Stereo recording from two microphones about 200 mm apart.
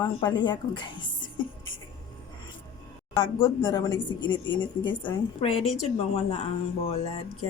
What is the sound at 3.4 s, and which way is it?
A woman's voice, 20° left (ahead or behind).